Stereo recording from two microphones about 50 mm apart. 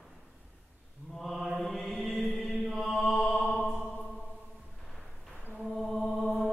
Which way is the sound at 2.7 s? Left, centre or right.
Centre.